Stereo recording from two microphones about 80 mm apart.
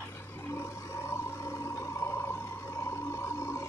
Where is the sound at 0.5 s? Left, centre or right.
Left.